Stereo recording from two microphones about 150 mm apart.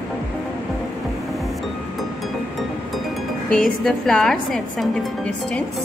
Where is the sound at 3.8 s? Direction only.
5° left (ahead or behind).